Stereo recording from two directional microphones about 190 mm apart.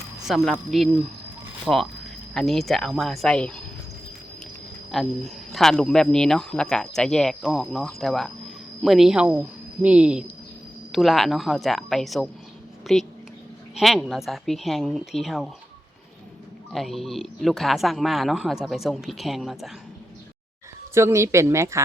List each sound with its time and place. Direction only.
0.3 s speech: centre (ahead or behind)
4.9 s a woman's voice: centre (ahead or behind)
16.7 s speech: centre (ahead or behind)
20.9 s a woman's voice: 15° right (ahead or behind)